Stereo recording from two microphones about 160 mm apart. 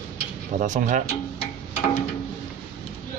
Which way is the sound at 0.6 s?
50° right (ahead or behind).